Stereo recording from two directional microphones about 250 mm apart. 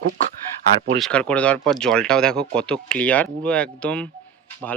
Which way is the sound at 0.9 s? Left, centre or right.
Centre.